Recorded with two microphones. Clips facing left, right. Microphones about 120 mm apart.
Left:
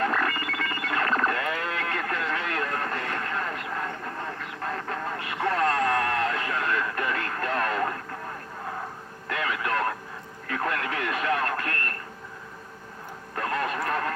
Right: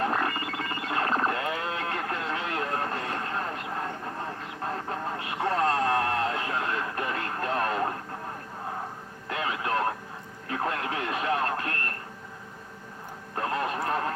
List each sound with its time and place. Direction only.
0.0 s music: 30° right (ahead or behind)
0.5 s a sound: 30° right (ahead or behind)
9.3 s radio: 25° right (ahead or behind)
13.3 s radio: 25° right (ahead or behind)